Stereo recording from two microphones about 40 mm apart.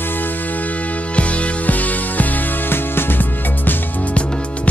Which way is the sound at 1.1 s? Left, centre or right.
Left.